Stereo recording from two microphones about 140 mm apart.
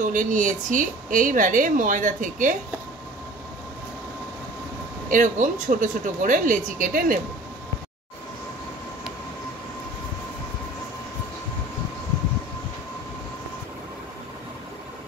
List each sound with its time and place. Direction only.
0.0 s a woman's voice: 70° right (ahead or behind)
5.1 s a woman's voice: 65° right (ahead or behind)